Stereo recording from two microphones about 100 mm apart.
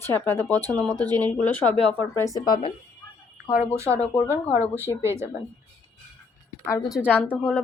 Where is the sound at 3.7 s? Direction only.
30° right (ahead or behind).